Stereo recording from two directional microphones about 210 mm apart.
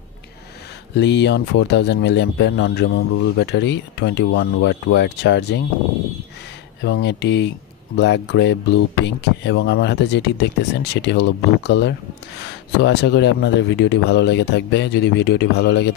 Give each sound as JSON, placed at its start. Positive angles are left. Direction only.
{"t": 0.9, "sound": "speech", "side_deg": 55}
{"t": 6.8, "sound": "speech", "side_deg": 55}